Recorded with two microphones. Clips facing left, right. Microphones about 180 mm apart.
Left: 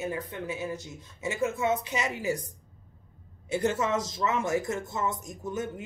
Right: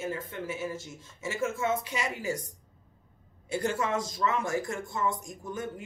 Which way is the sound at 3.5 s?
20° left (ahead or behind).